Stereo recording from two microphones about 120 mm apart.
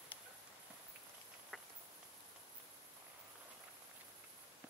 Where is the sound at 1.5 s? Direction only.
Centre (ahead or behind).